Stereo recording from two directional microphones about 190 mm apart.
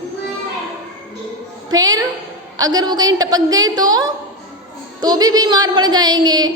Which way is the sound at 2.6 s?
20° right (ahead or behind).